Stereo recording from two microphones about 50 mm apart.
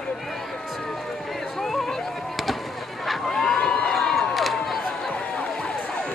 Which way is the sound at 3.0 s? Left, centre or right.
Centre.